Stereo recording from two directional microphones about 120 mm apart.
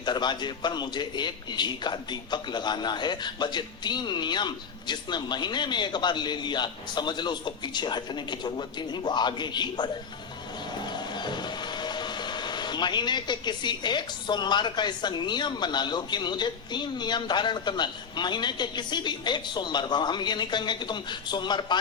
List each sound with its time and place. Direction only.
0.0 s music: 40° left (ahead or behind)